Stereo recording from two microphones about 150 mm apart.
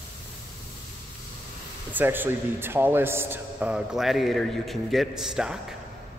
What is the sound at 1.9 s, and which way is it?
A man's voice, 15° right (ahead or behind).